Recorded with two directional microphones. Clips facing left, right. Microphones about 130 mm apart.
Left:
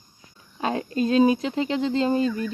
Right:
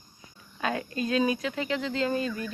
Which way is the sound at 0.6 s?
30° left (ahead or behind).